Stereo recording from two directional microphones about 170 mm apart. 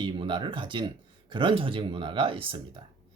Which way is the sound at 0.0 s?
30° right (ahead or behind).